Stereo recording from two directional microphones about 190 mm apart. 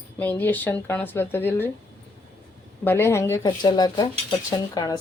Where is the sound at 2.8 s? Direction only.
15° left (ahead or behind).